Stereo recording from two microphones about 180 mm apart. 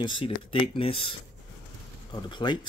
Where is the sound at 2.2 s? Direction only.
25° left (ahead or behind).